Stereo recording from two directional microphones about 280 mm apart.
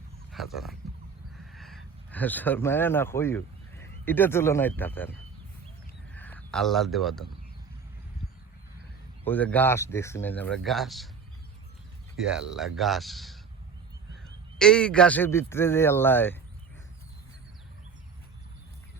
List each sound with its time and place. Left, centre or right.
0.3 s speech: centre
6.1 s speech: centre
9.2 s speech: centre
12.5 s speech: centre
14.6 s speech: centre